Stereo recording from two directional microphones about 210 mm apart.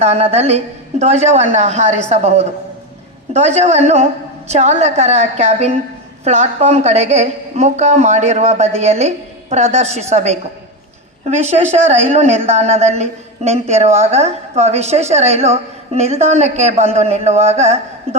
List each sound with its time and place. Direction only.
0.0 s speech: 30° right (ahead or behind)